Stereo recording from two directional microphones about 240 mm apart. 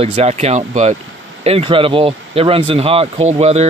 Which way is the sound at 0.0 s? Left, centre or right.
Right.